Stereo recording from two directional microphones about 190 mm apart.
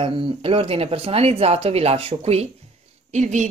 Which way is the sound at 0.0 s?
30° right (ahead or behind).